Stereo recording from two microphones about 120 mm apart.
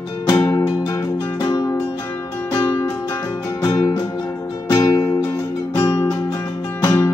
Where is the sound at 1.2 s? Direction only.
20° left (ahead or behind).